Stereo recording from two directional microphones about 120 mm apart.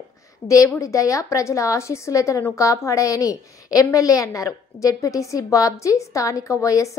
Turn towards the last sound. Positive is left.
turn(degrees=25)  # may be behind; listen again after turning